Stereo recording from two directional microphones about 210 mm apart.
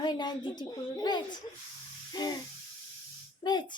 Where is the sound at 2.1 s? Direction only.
20° left (ahead or behind).